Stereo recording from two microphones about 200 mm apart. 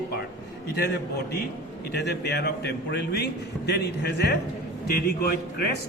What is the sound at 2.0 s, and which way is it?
A man's voice, 55° left (ahead or behind).